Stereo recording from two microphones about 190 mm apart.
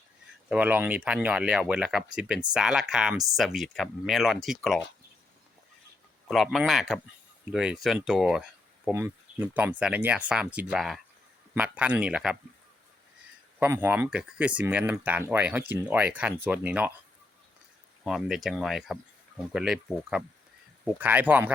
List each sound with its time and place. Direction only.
0.4 s speech: 5° right (ahead or behind)
6.2 s speech: centre (ahead or behind)
8.9 s speech: 15° right (ahead or behind)
13.6 s speech: 10° right (ahead or behind)
18.0 s speech: centre (ahead or behind)